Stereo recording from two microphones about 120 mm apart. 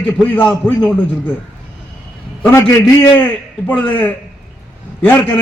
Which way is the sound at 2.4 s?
15° left (ahead or behind).